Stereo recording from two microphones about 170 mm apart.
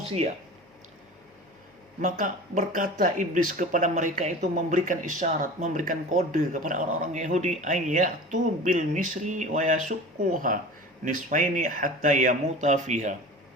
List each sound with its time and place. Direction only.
2.0 s speech: 50° right (ahead or behind)